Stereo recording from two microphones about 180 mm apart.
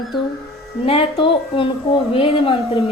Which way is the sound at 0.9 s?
30° left (ahead or behind).